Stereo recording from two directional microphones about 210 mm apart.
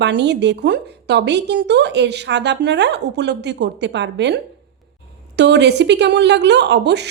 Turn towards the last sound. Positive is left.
turn(degrees=-55)  # may be behind; listen again after turning